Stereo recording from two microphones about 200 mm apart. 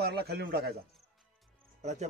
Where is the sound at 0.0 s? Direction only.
55° right (ahead or behind).